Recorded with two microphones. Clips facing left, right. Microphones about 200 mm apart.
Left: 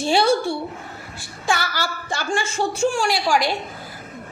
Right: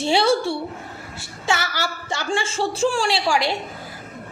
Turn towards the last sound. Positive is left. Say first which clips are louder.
# left 1 dB
turn(degrees=-25)  # may be behind; listen again after turning